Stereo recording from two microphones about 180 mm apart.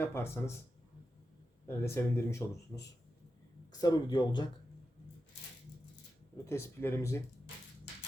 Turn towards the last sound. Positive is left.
turn(degrees=15)  # may be behind; listen again after turning